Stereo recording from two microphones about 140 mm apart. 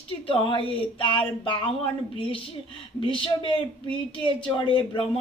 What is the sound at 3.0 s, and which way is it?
Speech, 40° left (ahead or behind).